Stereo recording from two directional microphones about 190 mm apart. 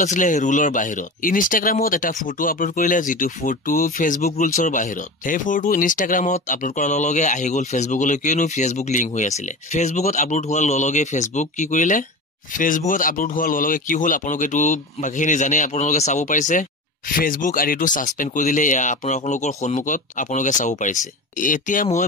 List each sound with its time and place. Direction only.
0.0 s speech: 40° left (ahead or behind)